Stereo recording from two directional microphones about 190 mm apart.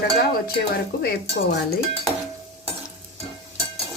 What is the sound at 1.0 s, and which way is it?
Dishes, 55° left (ahead or behind).